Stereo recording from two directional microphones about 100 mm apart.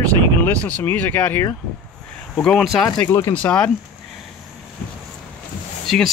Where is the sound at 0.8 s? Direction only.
20° left (ahead or behind).